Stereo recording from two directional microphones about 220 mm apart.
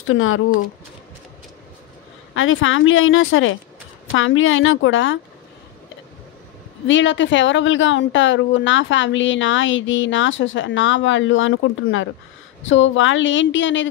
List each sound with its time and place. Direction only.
0.0 s a woman's voice: 65° left (ahead or behind)
2.3 s a woman's voice: 65° left (ahead or behind)
6.9 s a woman's voice: 55° left (ahead or behind)